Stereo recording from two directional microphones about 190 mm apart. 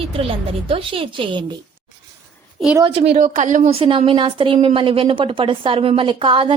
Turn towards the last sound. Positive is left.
turn(degrees=-25)  # may be behind; listen again after turning